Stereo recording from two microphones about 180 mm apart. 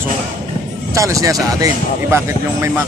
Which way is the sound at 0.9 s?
20° right (ahead or behind).